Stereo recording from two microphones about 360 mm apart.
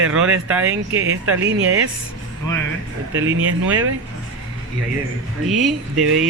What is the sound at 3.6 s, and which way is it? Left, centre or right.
Speech, centre.